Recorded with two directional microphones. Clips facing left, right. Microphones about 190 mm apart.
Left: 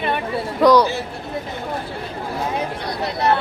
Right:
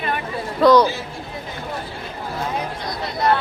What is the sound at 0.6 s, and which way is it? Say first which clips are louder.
Speech: even; 15° left (ahead or behind).